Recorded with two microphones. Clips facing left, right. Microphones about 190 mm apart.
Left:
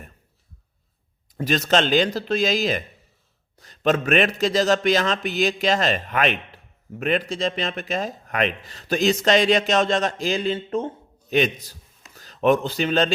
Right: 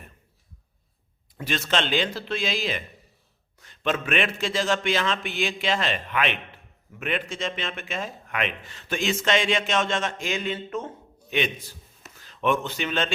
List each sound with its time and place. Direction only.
1.4 s speech: 40° left (ahead or behind)